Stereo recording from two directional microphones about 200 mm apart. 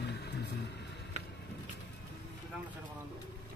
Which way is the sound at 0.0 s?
55° left (ahead or behind).